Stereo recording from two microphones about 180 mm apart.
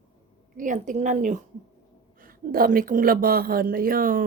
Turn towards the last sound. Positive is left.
turn(degrees=-50)  # may be behind; listen again after turning